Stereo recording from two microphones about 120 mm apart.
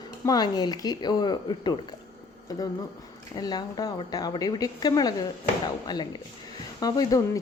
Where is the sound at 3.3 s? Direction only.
35° left (ahead or behind).